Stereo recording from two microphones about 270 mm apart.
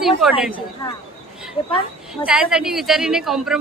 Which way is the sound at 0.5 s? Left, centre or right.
Centre.